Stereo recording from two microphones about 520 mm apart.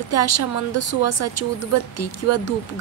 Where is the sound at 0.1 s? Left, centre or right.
Left.